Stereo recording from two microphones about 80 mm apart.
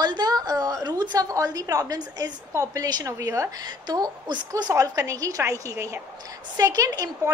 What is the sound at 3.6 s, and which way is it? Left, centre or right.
A woman's voice, right.